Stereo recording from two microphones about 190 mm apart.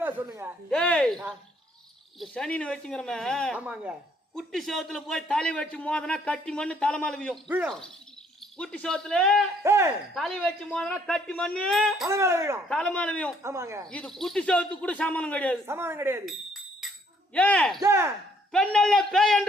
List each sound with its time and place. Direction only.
0.0 s a sound: 10° right (ahead or behind)
0.7 s a man's voice: 5° left (ahead or behind)
2.1 s a man's voice: centre (ahead or behind)
9.6 s speech: 15° right (ahead or behind)
10.2 s a man's voice: 5° left (ahead or behind)
12.0 s speech: 15° right (ahead or behind)
12.6 s a man's voice: 5° left (ahead or behind)
13.4 s speech: 15° right (ahead or behind)
13.9 s a man's voice: 5° left (ahead or behind)
15.6 s speech: 15° right (ahead or behind)
16.8 s tambourine: centre (ahead or behind)
17.3 s a man's voice: 5° left (ahead or behind)
17.8 s speech: 15° right (ahead or behind)
18.5 s a man's voice: 5° left (ahead or behind)